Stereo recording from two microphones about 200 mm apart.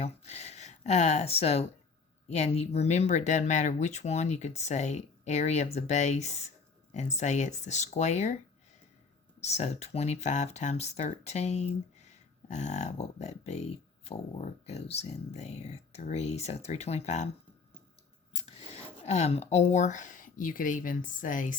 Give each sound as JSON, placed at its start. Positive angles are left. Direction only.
{"t": 0.0, "sound": "speech", "side_deg": 35}
{"t": 9.4, "sound": "speech", "side_deg": 35}
{"t": 18.4, "sound": "speech", "side_deg": 35}